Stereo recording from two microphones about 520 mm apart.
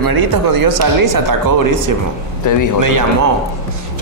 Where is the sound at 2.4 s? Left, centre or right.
Left.